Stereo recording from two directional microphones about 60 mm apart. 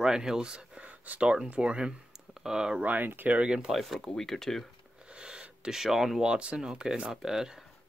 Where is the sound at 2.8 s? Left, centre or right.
Right.